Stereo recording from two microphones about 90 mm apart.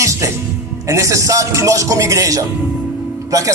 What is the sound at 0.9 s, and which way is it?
Speech, 35° right (ahead or behind).